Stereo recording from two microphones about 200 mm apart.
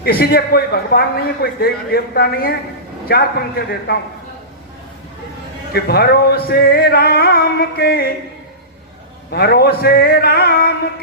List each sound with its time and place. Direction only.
0.0 s a man's voice: 50° left (ahead or behind)
5.7 s a man's voice: 50° left (ahead or behind)
9.3 s a man's voice: 50° left (ahead or behind)